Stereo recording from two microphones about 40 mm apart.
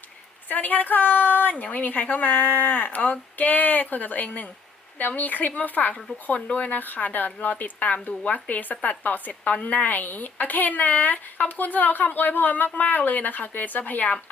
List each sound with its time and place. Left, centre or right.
0.4 s a woman's voice: left
9.6 s speech: left